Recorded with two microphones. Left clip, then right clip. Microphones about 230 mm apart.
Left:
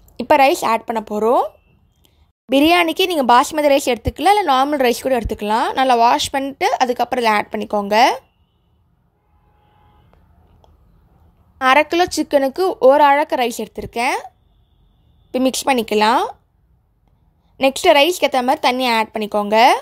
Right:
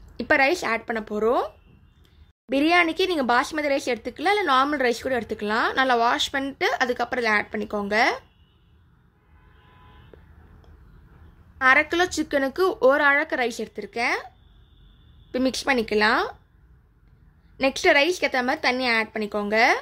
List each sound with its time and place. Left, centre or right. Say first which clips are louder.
0.1 s speech: left 7 dB; left
2.5 s speech: left 6 dB; left
11.5 s speech: left 5 dB; left
15.3 s speech: left 6 dB; left
17.6 s speech: left 7 dB; left